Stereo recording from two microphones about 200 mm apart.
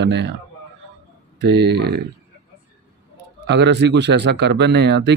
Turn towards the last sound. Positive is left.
turn(degrees=-60)  # may be behind; listen again after turning